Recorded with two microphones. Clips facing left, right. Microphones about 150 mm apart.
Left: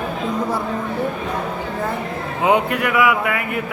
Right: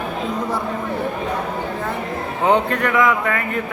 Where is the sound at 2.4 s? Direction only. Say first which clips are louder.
Even; 10° left (ahead or behind).